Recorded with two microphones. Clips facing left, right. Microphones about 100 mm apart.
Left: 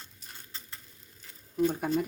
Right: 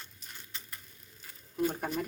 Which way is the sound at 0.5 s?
35° left (ahead or behind).